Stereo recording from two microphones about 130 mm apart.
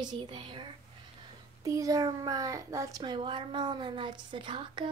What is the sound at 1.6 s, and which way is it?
A child's voice, 25° right (ahead or behind).